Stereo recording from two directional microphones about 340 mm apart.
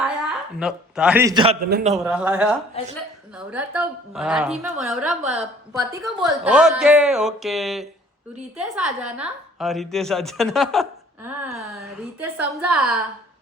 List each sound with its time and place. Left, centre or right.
0.0 s a man's voice: centre
2.0 s a woman's voice: centre
5.2 s a woman's voice: centre